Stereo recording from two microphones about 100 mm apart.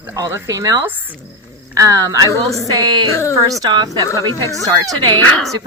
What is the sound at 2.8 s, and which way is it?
Speech, 45° right (ahead or behind).